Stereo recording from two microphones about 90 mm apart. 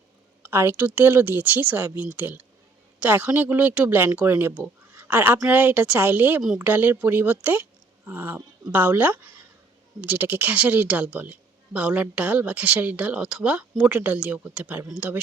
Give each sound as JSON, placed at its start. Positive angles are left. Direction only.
{"t": 0.5, "sound": "speech", "side_deg": -25}
{"t": 4.9, "sound": "a sound", "side_deg": -20}
{"t": 5.5, "sound": "a woman's voice", "side_deg": -20}